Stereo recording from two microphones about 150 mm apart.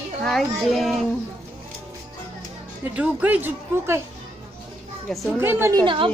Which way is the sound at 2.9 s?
10° right (ahead or behind).